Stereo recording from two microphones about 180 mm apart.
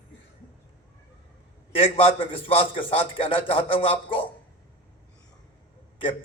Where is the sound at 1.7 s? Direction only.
30° left (ahead or behind).